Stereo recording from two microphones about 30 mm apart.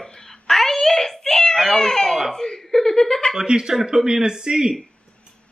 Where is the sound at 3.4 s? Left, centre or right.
Right.